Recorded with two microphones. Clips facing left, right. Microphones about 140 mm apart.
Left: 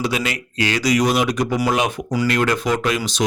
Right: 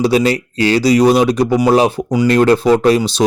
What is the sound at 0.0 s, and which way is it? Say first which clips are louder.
Speech: right 10 dB; 35° right (ahead or behind).